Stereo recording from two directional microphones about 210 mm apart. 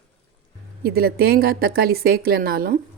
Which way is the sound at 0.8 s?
50° right (ahead or behind).